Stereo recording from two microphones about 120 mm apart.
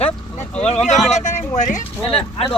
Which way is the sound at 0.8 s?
Centre (ahead or behind).